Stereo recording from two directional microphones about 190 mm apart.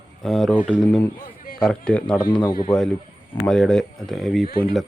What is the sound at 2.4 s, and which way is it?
Speech, 25° left (ahead or behind).